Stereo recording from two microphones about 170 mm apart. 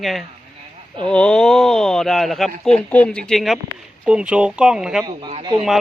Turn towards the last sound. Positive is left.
turn(degrees=-5)  # may be behind; listen again after turning